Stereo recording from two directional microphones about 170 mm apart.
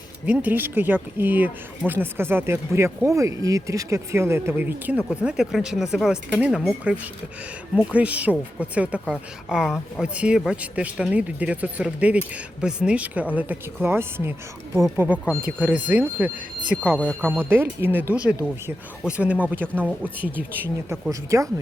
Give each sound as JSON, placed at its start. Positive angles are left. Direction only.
{"t": 0.3, "sound": "speech", "side_deg": -10}